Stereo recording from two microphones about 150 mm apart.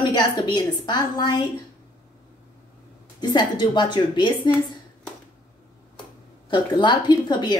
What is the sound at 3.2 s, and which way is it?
A woman's voice, 30° left (ahead or behind).